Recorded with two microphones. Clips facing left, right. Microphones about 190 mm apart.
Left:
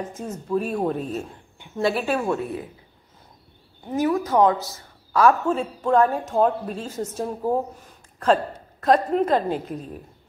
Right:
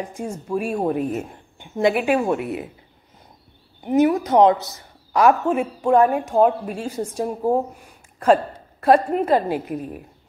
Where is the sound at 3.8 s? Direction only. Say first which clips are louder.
Right 5 dB; 20° right (ahead or behind).